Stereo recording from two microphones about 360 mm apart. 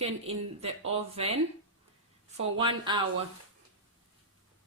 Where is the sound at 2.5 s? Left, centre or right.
Centre.